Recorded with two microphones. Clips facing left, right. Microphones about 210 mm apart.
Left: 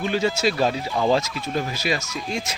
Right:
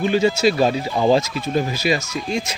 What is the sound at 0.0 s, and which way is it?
Speech, 5° right (ahead or behind).